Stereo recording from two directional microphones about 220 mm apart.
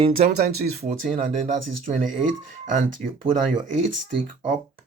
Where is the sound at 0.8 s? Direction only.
35° right (ahead or behind).